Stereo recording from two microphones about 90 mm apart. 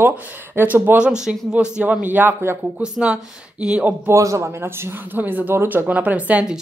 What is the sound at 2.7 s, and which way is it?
Speech, 10° right (ahead or behind).